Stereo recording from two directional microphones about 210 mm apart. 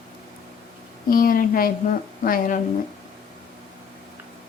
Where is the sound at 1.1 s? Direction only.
40° left (ahead or behind).